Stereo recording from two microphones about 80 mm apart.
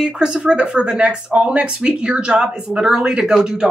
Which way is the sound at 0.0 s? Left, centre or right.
Centre.